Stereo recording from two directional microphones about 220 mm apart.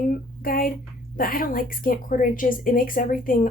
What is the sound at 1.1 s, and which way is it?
A woman's voice, 40° left (ahead or behind).